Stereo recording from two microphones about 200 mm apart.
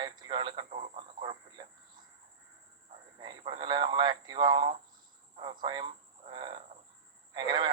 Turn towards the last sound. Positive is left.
turn(degrees=-25)  # may be behind; listen again after turning